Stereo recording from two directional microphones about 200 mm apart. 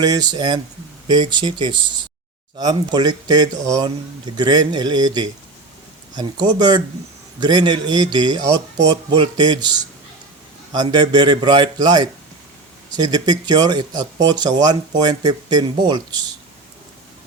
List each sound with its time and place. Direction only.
0.0 s speech: 20° right (ahead or behind)
10.7 s speech: 20° right (ahead or behind)